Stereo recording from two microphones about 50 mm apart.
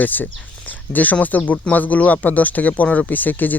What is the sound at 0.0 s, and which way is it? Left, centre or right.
Speech, left.